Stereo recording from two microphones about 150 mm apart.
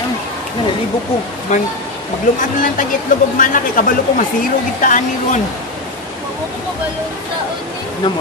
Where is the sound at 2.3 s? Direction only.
60° left (ahead or behind).